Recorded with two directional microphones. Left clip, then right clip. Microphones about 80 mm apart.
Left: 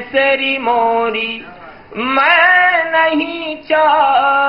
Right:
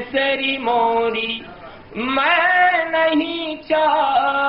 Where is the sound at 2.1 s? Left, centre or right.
Left.